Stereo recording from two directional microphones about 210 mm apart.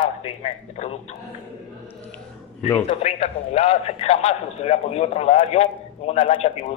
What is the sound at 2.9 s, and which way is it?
A man's voice, 30° left (ahead or behind).